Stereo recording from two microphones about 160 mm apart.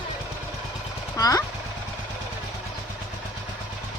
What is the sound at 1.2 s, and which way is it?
Speech, 20° left (ahead or behind).